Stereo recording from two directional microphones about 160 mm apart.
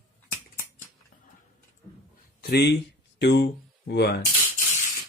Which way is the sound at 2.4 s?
85° left.